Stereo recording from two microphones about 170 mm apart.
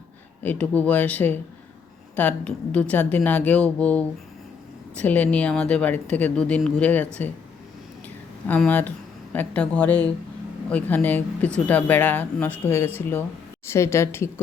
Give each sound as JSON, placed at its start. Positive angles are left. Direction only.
{"t": 0.4, "sound": "speech", "side_deg": 10}
{"t": 8.4, "sound": "speech", "side_deg": 10}